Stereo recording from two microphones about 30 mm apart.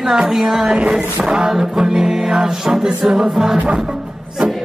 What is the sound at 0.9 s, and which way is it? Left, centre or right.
Music, right.